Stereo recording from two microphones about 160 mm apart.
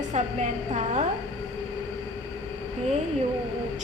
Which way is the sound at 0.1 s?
45° right (ahead or behind).